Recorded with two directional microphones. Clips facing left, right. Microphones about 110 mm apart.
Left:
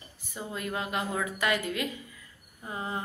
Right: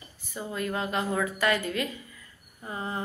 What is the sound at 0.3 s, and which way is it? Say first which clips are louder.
Speech: right 3 dB; 15° left (ahead or behind).